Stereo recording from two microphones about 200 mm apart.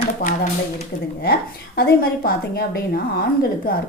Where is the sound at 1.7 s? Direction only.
50° left (ahead or behind).